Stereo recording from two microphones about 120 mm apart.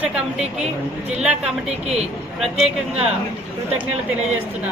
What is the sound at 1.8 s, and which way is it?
Speech, 60° right (ahead or behind).